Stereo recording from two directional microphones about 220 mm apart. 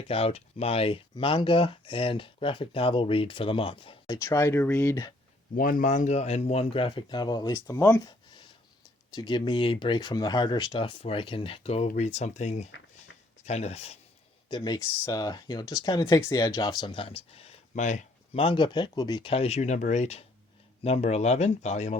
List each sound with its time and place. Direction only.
0.1 s speech: 25° left (ahead or behind)
4.2 s speech: 10° left (ahead or behind)
5.5 s speech: 40° left (ahead or behind)